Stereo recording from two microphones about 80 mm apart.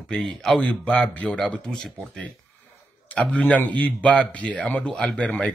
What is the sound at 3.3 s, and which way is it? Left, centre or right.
Speech, centre.